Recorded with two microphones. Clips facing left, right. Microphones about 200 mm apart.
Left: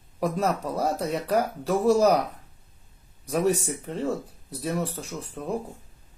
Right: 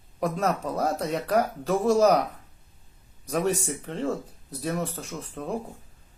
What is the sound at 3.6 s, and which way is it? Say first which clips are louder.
A man's voice: even; 5° left (ahead or behind).